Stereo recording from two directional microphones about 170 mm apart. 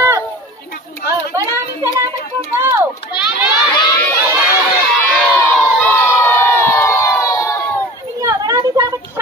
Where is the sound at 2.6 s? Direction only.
15° right (ahead or behind).